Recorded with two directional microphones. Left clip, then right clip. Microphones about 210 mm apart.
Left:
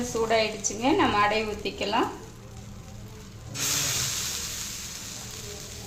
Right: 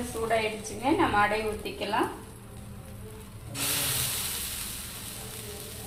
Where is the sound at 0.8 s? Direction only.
60° left (ahead or behind).